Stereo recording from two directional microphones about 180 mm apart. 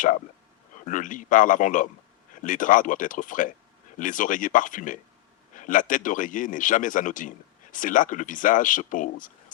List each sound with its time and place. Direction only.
0.9 s speech: 45° left (ahead or behind)